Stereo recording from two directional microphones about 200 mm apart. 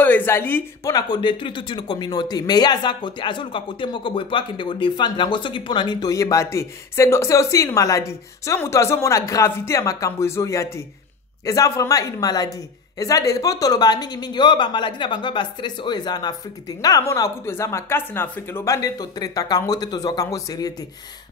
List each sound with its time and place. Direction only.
0.0 s speech: 10° left (ahead or behind)